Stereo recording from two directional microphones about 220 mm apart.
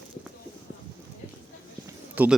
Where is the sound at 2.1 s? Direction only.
5° right (ahead or behind).